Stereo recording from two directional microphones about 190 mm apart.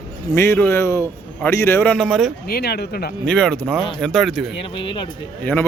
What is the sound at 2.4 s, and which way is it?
Speech, 55° left (ahead or behind).